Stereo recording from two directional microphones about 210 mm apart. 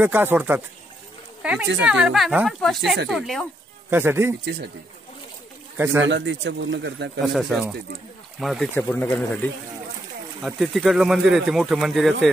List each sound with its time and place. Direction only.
0.0 s speech: 10° right (ahead or behind)
3.9 s speech: 10° right (ahead or behind)
6.0 s speech: 60° right (ahead or behind)
7.3 s speech: centre (ahead or behind)
8.7 s speech: 10° left (ahead or behind)